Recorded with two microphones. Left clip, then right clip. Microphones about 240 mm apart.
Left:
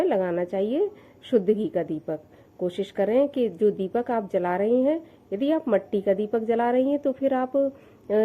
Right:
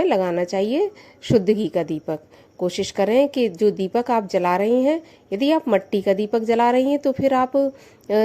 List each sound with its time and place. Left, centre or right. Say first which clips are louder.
0.0 s speech: right 4 dB; right